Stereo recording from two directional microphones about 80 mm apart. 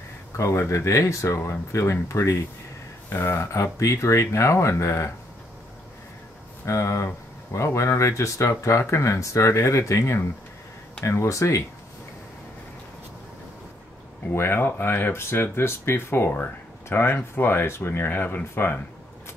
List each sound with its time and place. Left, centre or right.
0.4 s speech: left
6.6 s speech: left
14.3 s speech: left